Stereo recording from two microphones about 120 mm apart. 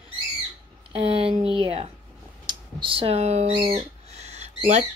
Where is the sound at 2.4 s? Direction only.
45° right (ahead or behind); by 4.8 s 70° right (ahead or behind).